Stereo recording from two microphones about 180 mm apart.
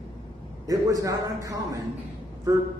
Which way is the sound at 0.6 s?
20° right (ahead or behind).